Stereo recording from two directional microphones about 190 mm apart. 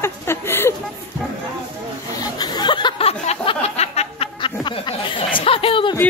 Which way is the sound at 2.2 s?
20° left (ahead or behind).